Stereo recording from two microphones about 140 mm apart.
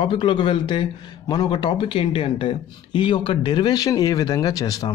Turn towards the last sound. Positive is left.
turn(degrees=25)  # may be behind; listen again after turning